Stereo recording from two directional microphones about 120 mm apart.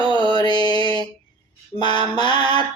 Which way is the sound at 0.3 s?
40° left (ahead or behind).